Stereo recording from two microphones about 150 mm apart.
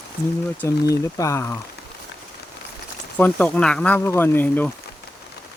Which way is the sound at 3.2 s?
10° left (ahead or behind).